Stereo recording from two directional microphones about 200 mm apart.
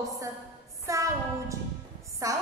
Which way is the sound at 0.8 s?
15° right (ahead or behind).